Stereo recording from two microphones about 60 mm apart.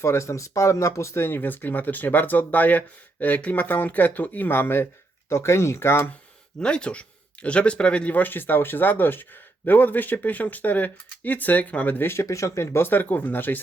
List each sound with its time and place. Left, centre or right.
0.0 s speech: left
5.3 s speech: left
6.6 s speech: centre
11.9 s speech: left
12.2 s speech: left
12.7 s speech: left